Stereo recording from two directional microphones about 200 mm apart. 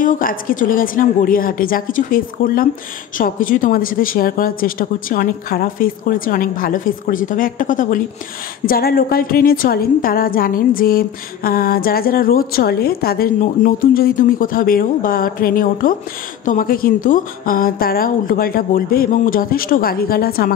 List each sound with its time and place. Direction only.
0.0 s a woman's voice: 45° left (ahead or behind)